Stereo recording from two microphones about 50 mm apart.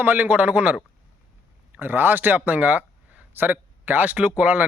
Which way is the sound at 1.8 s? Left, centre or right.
Right.